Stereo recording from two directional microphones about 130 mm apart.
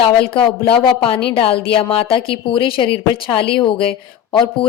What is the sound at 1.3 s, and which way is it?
A woman's voice, 45° left (ahead or behind).